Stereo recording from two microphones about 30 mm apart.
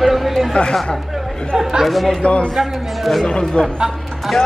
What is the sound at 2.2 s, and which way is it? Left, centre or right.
Speech, left.